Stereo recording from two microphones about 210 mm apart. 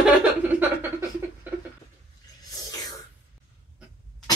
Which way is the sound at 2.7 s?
15° left (ahead or behind).